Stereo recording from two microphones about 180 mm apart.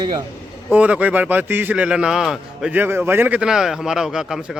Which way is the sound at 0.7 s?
10° right (ahead or behind).